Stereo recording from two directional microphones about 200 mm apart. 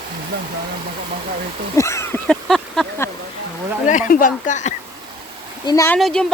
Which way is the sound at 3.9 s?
40° left (ahead or behind).